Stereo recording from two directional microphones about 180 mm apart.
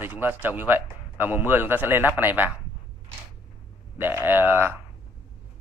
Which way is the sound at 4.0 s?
10° right (ahead or behind).